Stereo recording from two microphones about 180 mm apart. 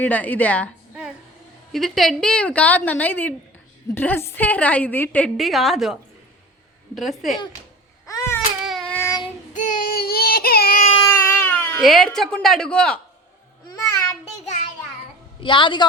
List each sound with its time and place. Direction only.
0.0 s a woman's voice: 10° left (ahead or behind)
1.7 s a woman's voice: centre (ahead or behind)
8.0 s baby cry: 15° left (ahead or behind)
8.6 s baby cry: centre (ahead or behind)
9.0 s child singing: 15° left (ahead or behind)
9.5 s child singing: 45° left (ahead or behind)
11.1 s speech: 10° left (ahead or behind)
13.7 s child singing: 20° left (ahead or behind)
15.4 s a woman's voice: 25° left (ahead or behind)